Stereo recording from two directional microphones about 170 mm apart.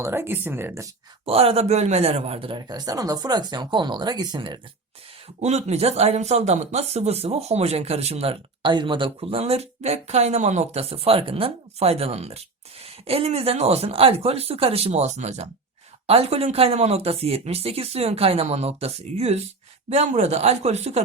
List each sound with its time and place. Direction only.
0.0 s speech: 15° right (ahead or behind)
1.2 s speech: 35° right (ahead or behind)
5.4 s speech: 40° right (ahead or behind)